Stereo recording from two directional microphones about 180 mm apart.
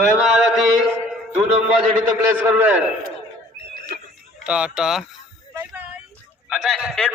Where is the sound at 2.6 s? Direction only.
10° right (ahead or behind).